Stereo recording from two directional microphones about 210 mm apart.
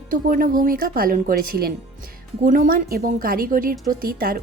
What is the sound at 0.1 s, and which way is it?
A woman's voice, 40° right (ahead or behind).